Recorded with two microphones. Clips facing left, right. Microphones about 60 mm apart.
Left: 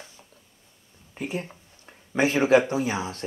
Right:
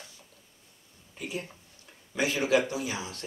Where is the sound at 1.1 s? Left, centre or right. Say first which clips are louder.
Left 5 dB; left.